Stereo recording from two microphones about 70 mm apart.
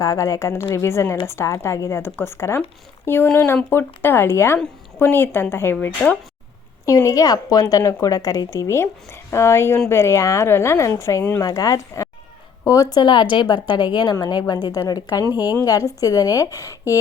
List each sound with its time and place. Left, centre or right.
0.0 s a woman's voice: left
6.0 s speech: left
6.8 s a woman's voice: left
15.3 s a woman's voice: right
16.0 s a woman's voice: left